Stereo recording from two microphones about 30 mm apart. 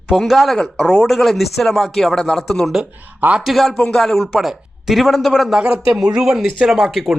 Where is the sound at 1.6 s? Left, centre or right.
Centre.